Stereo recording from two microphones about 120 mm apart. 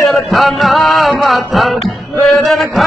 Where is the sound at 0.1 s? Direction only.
Centre (ahead or behind).